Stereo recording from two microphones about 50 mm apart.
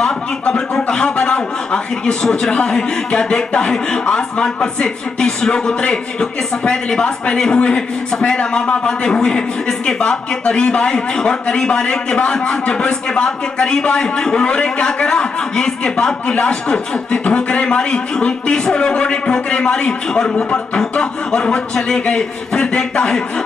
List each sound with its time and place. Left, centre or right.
0.0 s a man's voice: centre